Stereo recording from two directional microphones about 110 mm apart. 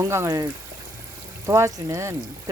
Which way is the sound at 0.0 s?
25° right (ahead or behind).